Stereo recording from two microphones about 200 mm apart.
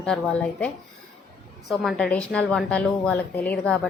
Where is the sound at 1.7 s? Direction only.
Centre (ahead or behind).